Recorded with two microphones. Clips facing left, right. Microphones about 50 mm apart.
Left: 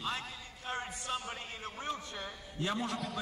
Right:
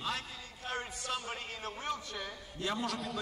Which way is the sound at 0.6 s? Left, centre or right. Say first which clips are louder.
Even; left.